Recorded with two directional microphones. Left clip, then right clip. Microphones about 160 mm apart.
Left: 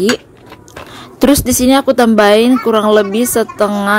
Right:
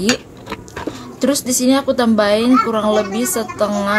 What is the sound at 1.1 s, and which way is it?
Speech, 55° left (ahead or behind).